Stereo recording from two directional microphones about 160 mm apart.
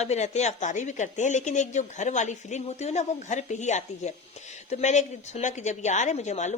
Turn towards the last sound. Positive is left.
turn(degrees=45)  # may be behind; listen again after turning